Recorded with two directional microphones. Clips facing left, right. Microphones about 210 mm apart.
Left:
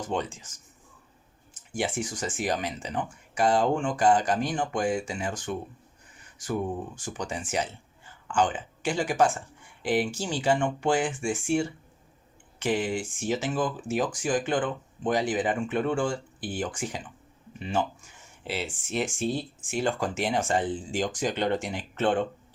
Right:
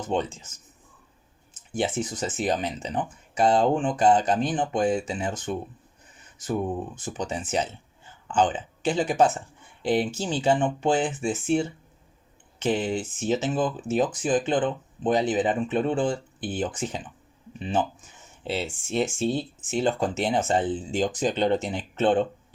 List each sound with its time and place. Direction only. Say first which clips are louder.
0.0 s speech: right 3 dB; 25° right (ahead or behind)
1.7 s speech: right 3 dB; 20° right (ahead or behind)
6.7 s speech: right 3 dB; 20° right (ahead or behind)